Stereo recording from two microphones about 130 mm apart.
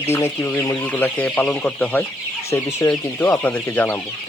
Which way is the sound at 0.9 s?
10° left (ahead or behind).